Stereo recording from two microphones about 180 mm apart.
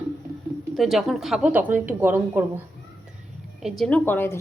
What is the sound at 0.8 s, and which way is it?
A woman's voice, centre (ahead or behind).